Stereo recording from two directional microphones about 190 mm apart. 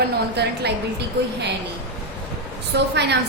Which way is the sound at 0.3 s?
60° right (ahead or behind).